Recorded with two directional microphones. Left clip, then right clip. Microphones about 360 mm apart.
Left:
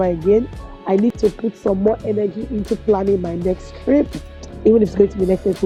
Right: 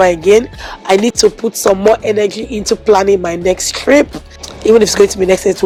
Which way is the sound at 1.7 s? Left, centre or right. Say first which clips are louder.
Right 8 dB; centre.